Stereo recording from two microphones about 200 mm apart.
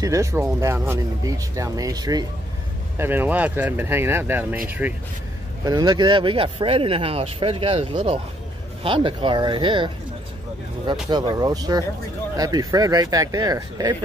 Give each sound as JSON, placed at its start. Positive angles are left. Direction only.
{"t": 0.0, "sound": "speech", "side_deg": -15}
{"t": 5.7, "sound": "speech", "side_deg": -20}
{"t": 11.1, "sound": "speech", "side_deg": -20}